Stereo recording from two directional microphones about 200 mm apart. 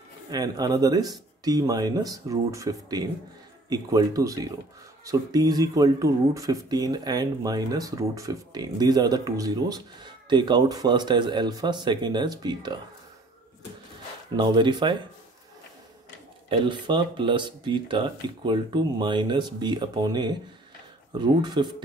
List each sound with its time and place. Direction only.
0.3 s speech: 20° right (ahead or behind)
14.3 s speech: 20° right (ahead or behind)
16.4 s speech: 25° right (ahead or behind)